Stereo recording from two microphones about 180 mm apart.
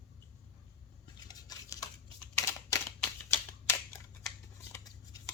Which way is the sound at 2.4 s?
15° left (ahead or behind).